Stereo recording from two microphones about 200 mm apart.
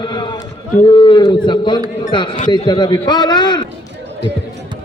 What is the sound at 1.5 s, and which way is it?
A man's voice, 25° left (ahead or behind).